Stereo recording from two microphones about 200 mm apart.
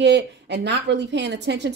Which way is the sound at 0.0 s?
60° right (ahead or behind).